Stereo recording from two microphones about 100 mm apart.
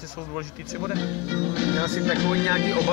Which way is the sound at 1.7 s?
75° right (ahead or behind).